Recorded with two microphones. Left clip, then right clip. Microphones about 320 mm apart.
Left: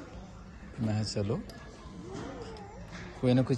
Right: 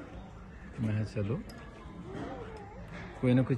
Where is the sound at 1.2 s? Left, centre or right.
Centre.